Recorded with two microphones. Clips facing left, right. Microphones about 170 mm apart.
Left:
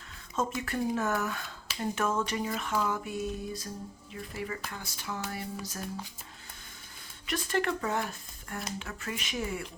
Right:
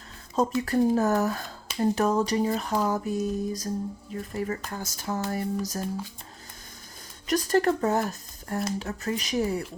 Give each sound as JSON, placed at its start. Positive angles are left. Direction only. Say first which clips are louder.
{"t": 0.6, "sound": "speech", "louder": "right 8 dB", "side_deg": -35}
{"t": 7.3, "sound": "speech", "louder": "right 8 dB", "side_deg": -40}